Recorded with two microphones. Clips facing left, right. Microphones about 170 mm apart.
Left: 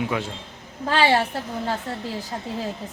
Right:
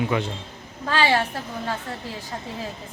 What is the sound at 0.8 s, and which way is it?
Speech, 30° left (ahead or behind).